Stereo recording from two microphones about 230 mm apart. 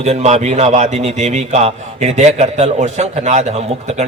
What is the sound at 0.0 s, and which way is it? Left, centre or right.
A man's voice, right.